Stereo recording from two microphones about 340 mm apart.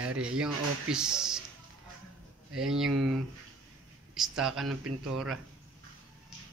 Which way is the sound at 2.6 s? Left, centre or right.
Centre.